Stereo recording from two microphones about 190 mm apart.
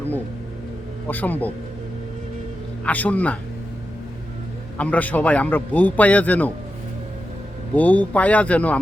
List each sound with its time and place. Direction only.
1.0 s a man's voice: 10° left (ahead or behind)
2.8 s a man's voice: 10° left (ahead or behind)
4.8 s a man's voice: 10° left (ahead or behind)
7.8 s a man's voice: 10° left (ahead or behind)